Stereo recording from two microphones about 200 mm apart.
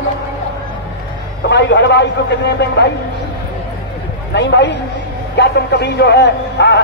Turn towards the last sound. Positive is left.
turn(degrees=60)  # may be behind; listen again after turning